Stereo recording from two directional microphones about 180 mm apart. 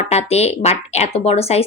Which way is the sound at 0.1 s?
35° left (ahead or behind).